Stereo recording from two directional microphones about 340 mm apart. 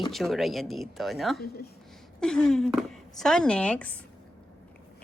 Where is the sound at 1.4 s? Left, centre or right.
Left.